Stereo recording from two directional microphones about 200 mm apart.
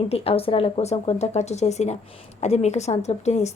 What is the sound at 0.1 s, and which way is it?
A woman's voice, 30° left (ahead or behind).